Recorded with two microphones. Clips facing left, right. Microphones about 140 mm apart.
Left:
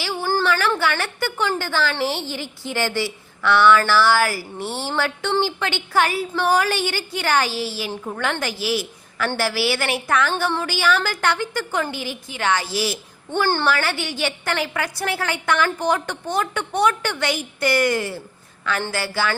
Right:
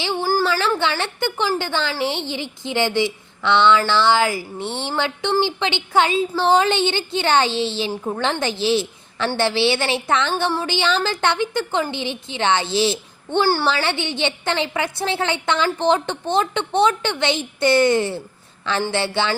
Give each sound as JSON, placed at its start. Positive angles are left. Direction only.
{"t": 0.0, "sound": "a sound", "side_deg": -20}
{"t": 0.8, "sound": "a woman's voice", "side_deg": -20}
{"t": 13.4, "sound": "a woman's voice", "side_deg": -10}
{"t": 13.7, "sound": "a woman's voice", "side_deg": -25}